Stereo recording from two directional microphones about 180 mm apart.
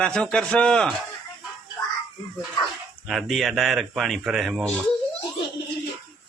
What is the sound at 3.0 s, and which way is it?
Speech, centre (ahead or behind).